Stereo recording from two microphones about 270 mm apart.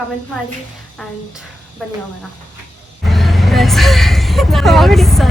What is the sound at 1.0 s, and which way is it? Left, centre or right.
Speech, centre.